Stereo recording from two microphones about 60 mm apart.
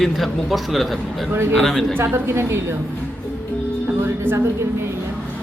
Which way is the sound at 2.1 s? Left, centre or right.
Right.